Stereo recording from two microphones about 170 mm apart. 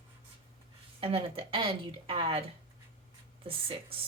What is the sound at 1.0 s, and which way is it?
Speech, 30° right (ahead or behind).